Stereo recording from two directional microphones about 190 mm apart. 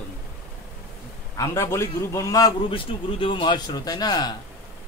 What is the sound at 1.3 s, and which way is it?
A man's voice, 15° left (ahead or behind).